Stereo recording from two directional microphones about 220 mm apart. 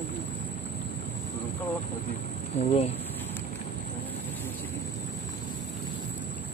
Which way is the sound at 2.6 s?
25° left (ahead or behind).